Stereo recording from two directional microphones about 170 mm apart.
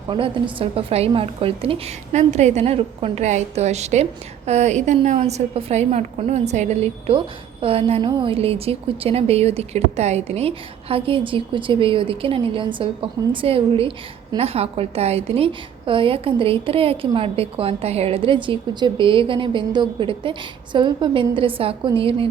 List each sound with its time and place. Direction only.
0.1 s a woman's voice: 30° right (ahead or behind)